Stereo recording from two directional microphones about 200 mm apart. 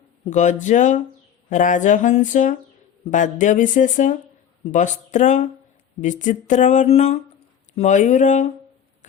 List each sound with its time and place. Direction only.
0.3 s speech: 40° left (ahead or behind)